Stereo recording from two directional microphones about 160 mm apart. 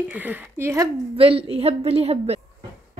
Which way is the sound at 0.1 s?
10° right (ahead or behind).